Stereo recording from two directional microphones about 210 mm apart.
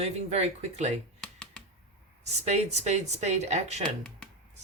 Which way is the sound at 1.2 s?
5° left (ahead or behind).